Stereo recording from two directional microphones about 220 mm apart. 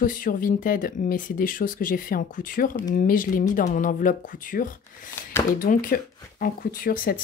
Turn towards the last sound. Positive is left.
turn(degrees=40)  # may be behind; listen again after turning